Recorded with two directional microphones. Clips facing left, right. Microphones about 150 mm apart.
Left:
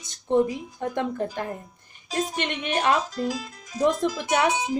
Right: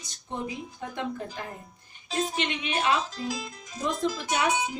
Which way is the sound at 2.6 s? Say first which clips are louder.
Left 4 dB; 45° left (ahead or behind).